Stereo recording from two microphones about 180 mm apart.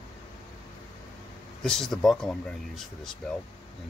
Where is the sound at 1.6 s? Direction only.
Centre (ahead or behind).